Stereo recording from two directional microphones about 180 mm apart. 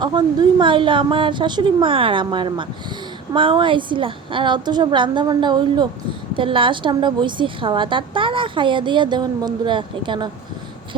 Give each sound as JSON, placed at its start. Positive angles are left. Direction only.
{"t": 0.0, "sound": "a woman's voice", "side_deg": -25}